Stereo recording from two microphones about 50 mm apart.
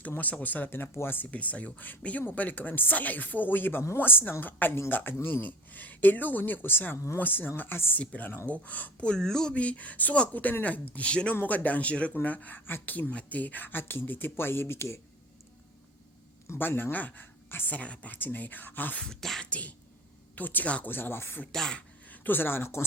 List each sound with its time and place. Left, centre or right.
0.2 s a woman's voice: left
1.3 s a woman's voice: left
7.9 s speech: left
9.0 s speech: centre
9.6 s speech: left
16.6 s a woman's voice: left
16.9 s a woman's voice: left
17.7 s speech: left
19.0 s speech: centre
19.4 s speech: left
20.8 s a woman's voice: left
21.5 s speech: centre
22.1 s speech: left